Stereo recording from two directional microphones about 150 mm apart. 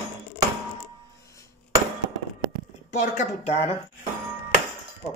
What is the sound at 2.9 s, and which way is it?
Speech, 50° left (ahead or behind).